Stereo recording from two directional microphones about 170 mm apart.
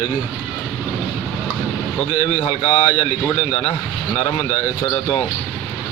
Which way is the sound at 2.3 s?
40° left (ahead or behind).